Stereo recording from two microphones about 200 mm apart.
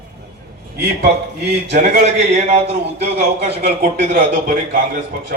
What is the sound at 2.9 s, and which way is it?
Speech, 55° right (ahead or behind).